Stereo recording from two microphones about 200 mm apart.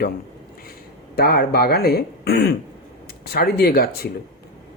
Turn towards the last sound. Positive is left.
turn(degrees=50)  # may be behind; listen again after turning